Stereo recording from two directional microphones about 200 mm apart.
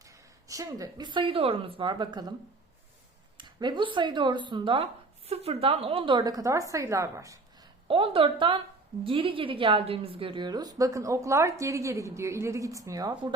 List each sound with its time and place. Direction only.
0.0 s a woman's voice: 15° right (ahead or behind)
3.3 s a woman's voice: 20° right (ahead or behind)
7.9 s a woman's voice: 25° right (ahead or behind)